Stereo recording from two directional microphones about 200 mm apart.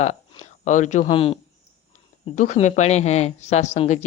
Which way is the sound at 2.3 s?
40° left (ahead or behind).